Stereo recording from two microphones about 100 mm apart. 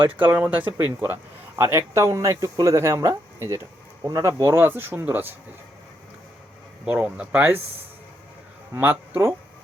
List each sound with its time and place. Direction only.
0.2 s speech: 15° right (ahead or behind)
6.8 s speech: 15° right (ahead or behind)
8.7 s speech: 20° right (ahead or behind)